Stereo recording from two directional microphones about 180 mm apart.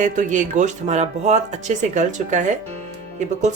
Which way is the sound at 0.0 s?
45° right (ahead or behind).